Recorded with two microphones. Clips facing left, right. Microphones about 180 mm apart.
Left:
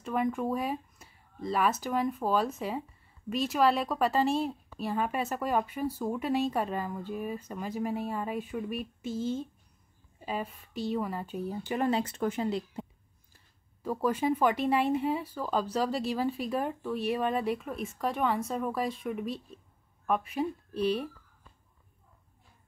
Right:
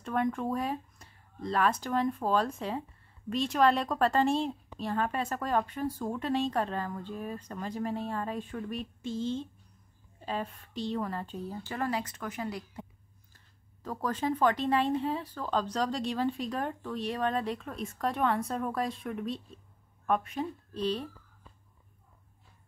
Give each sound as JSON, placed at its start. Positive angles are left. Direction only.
{"t": 0.0, "sound": "speech", "side_deg": 5}
{"t": 13.8, "sound": "speech", "side_deg": 10}